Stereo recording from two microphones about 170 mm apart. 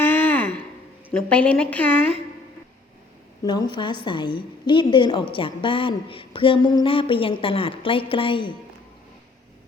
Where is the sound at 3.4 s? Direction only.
25° left (ahead or behind).